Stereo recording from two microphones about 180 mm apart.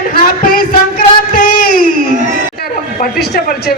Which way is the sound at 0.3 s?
55° left (ahead or behind).